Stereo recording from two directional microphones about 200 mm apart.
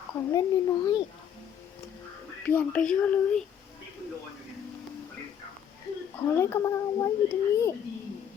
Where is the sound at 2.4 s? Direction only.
10° left (ahead or behind).